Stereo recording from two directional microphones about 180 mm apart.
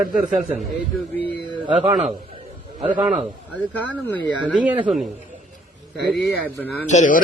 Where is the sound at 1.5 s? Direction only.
30° right (ahead or behind).